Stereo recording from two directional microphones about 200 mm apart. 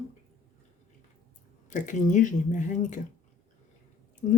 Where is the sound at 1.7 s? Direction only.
40° left (ahead or behind).